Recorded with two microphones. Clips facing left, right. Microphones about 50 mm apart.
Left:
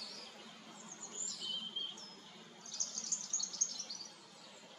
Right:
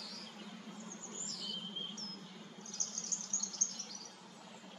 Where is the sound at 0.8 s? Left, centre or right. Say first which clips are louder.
Right 3 dB; right.